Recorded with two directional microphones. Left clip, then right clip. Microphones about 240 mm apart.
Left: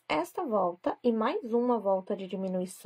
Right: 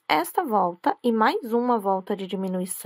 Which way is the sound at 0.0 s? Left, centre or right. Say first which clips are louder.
Right 8 dB; right.